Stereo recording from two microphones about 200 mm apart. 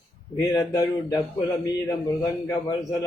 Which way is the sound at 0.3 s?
20° left (ahead or behind).